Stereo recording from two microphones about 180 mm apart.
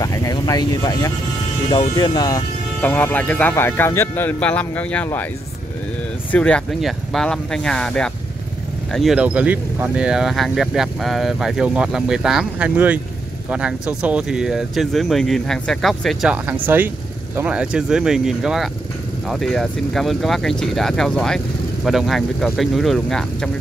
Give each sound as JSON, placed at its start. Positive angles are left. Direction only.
{"t": 0.0, "sound": "vehicle", "side_deg": 20}
{"t": 1.7, "sound": "speech", "side_deg": 25}
{"t": 2.9, "sound": "speech", "side_deg": 10}
{"t": 6.3, "sound": "speech", "side_deg": 5}